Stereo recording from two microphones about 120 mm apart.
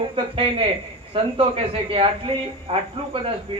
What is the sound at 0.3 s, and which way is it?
A man's voice, 50° right (ahead or behind).